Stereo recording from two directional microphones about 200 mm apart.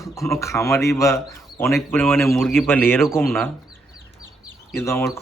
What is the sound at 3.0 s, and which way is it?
Speech, centre (ahead or behind).